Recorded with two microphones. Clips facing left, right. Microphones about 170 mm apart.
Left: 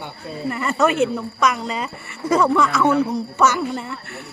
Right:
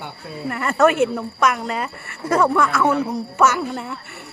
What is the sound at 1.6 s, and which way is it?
Speech, 55° right (ahead or behind).